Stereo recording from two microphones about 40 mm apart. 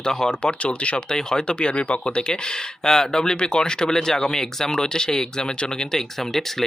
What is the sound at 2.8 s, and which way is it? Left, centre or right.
Speech, centre.